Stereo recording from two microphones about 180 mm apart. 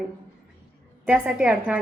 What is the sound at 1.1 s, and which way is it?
Speech, 5° right (ahead or behind).